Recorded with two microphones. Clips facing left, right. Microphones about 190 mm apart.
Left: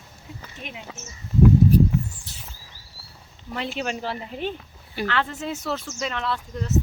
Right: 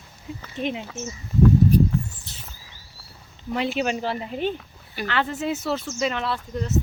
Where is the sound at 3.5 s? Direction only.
5° right (ahead or behind).